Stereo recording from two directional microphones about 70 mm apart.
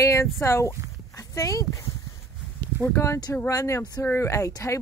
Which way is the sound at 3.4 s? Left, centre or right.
Left.